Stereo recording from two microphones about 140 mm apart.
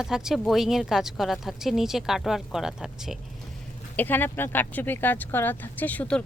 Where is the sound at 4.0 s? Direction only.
15° left (ahead or behind).